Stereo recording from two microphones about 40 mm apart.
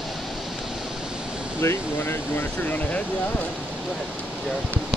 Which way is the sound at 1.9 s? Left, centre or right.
Left.